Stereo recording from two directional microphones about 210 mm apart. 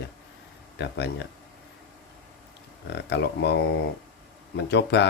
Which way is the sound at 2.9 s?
55° left (ahead or behind).